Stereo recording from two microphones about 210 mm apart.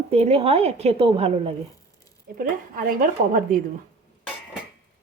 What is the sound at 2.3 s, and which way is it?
A woman's voice, 45° right (ahead or behind).